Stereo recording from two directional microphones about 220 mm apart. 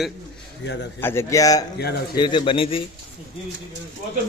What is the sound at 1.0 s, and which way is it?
Speech, 10° left (ahead or behind).